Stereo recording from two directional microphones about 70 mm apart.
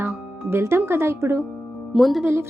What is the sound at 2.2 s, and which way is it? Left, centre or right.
Speech, right.